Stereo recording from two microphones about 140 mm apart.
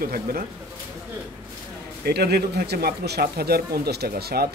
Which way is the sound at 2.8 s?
90° right.